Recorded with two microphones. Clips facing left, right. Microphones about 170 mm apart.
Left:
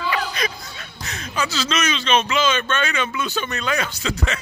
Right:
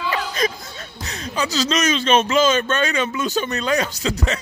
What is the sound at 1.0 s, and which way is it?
Speech, 35° right (ahead or behind).